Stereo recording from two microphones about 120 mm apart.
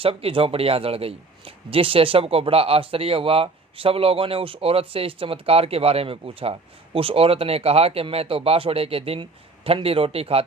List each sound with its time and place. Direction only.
0.0 s a man's voice: 50° right (ahead or behind)